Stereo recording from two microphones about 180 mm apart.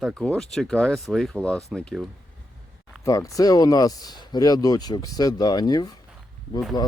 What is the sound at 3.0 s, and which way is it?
Speech, 15° left (ahead or behind).